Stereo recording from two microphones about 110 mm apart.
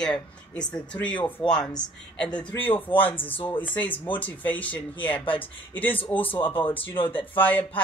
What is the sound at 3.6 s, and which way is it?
Speech, 15° left (ahead or behind).